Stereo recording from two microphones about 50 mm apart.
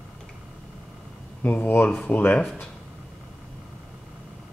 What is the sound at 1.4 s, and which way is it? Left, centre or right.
Speech, left.